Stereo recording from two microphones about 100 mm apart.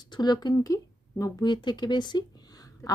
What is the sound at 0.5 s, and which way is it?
Speech, 35° left (ahead or behind).